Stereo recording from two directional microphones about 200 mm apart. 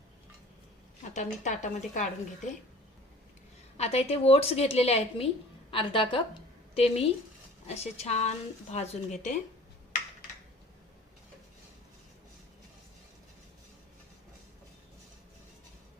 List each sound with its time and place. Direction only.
1.1 s a woman's voice: 35° left (ahead or behind)
3.8 s a woman's voice: 30° left (ahead or behind)